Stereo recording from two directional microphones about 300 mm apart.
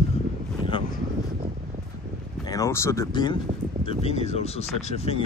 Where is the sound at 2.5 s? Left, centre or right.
Centre.